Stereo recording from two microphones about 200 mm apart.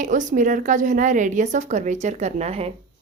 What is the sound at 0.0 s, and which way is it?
A woman's voice, 40° right (ahead or behind).